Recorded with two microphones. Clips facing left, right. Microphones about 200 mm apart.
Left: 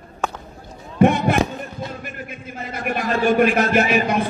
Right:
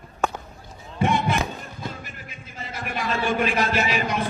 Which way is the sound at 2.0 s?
55° left (ahead or behind).